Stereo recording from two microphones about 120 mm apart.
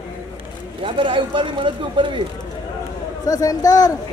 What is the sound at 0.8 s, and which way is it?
Speech, 45° right (ahead or behind).